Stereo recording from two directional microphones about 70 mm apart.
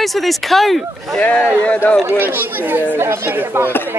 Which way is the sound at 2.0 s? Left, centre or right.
Right.